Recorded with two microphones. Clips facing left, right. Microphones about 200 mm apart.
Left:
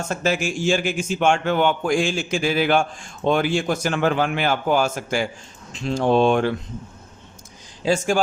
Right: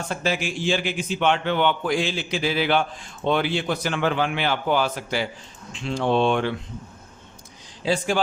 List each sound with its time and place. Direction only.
0.1 s a man's voice: 45° left (ahead or behind)
7.9 s a man's voice: 45° left (ahead or behind)